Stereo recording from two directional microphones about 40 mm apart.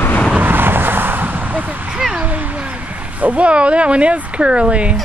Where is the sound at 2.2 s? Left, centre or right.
Right.